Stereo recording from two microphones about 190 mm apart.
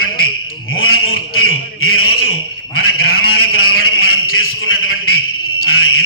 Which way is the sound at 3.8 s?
90° left.